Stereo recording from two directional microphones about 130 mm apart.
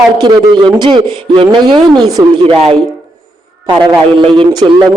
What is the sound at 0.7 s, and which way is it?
A man's voice, 35° right (ahead or behind).